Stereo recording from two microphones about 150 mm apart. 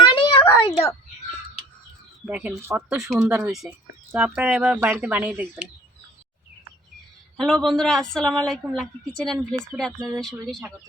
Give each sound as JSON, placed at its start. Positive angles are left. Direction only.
{"t": 0.0, "sound": "a sound", "side_deg": 35}
{"t": 2.2, "sound": "speech", "side_deg": -5}
{"t": 7.3, "sound": "a woman's voice", "side_deg": 0}